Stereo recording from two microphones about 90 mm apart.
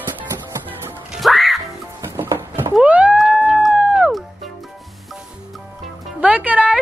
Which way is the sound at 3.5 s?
5° right (ahead or behind).